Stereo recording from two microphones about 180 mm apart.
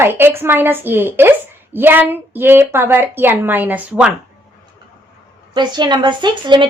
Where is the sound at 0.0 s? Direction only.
10° right (ahead or behind).